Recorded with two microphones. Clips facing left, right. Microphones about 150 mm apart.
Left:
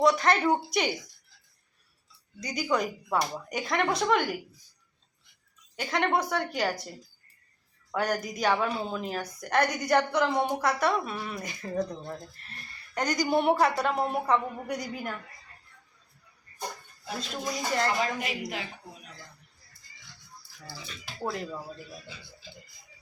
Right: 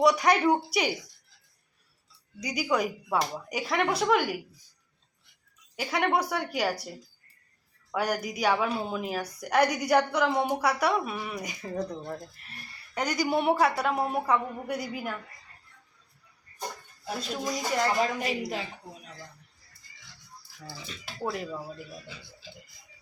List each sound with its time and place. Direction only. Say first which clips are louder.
0.0 s a woman's voice: right 1 dB; 10° right (ahead or behind)
2.4 s a woman's voice: right 1 dB; 10° right (ahead or behind)
5.7 s a woman's voice: even; 5° right (ahead or behind)
7.9 s a woman's voice: even; 10° right (ahead or behind)
17.7 s a woman's voice: right 2 dB; 5° right (ahead or behind)
18.2 s a woman's voice: right 3 dB; 35° right (ahead or behind)
21.2 s a woman's voice: right 1 dB; 10° right (ahead or behind)